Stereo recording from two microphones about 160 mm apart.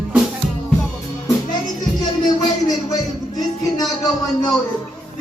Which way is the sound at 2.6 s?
25° left (ahead or behind).